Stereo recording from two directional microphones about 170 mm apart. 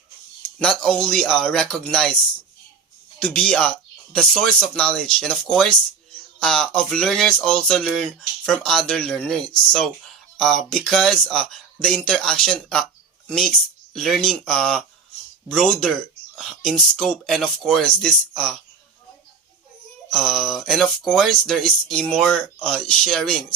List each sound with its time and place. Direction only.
0.6 s speech: 5° left (ahead or behind)
3.2 s speech: 5° left (ahead or behind)
20.1 s speech: centre (ahead or behind)